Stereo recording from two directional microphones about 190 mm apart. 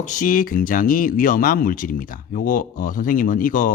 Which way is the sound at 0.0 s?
40° left (ahead or behind).